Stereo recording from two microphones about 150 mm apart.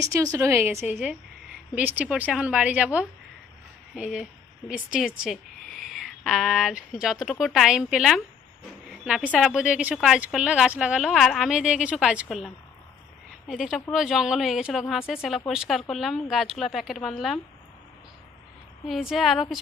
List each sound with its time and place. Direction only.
0.0 s a woman's voice: 20° right (ahead or behind); by 12.5 s 5° right (ahead or behind)
13.5 s a woman's voice: centre (ahead or behind)
18.9 s a woman's voice: centre (ahead or behind)